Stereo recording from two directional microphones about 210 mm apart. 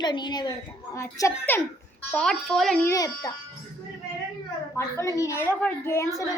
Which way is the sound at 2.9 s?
15° left (ahead or behind).